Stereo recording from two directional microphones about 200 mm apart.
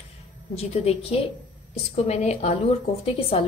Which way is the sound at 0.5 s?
30° left (ahead or behind).